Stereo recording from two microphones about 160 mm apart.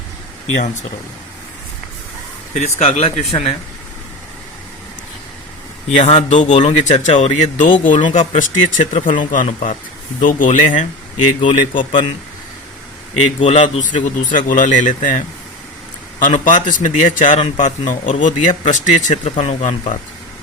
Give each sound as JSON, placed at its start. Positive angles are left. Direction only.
{"t": 2.5, "sound": "a man's voice", "side_deg": 45}
{"t": 6.0, "sound": "a man's voice", "side_deg": 45}
{"t": 11.3, "sound": "speech", "side_deg": 30}
{"t": 13.4, "sound": "a man's voice", "side_deg": 45}
{"t": 14.0, "sound": "a man's voice", "side_deg": 55}
{"t": 16.2, "sound": "a man's voice", "side_deg": 55}